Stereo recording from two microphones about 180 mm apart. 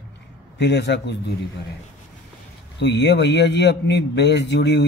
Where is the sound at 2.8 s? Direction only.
75° left (ahead or behind).